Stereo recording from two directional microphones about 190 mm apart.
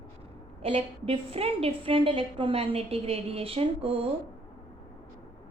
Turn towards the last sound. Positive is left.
turn(degrees=-30)  # may be behind; listen again after turning